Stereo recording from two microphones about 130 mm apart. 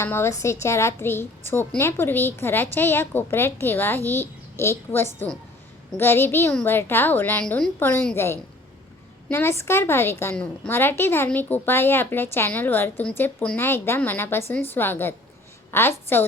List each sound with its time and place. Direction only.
0.0 s a woman's voice: 20° left (ahead or behind)